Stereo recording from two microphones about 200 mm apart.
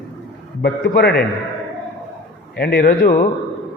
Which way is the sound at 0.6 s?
50° left (ahead or behind).